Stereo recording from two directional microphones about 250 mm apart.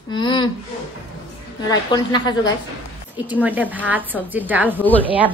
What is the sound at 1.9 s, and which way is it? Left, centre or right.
Speech, centre.